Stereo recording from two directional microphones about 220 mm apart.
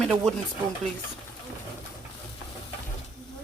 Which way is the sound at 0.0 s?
Centre (ahead or behind).